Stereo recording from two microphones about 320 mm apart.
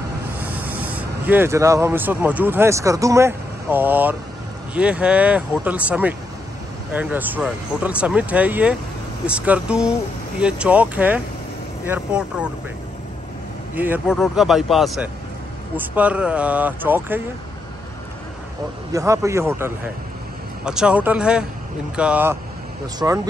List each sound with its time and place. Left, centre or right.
0.4 s speech: centre
13.7 s speech: centre
18.9 s a man's voice: centre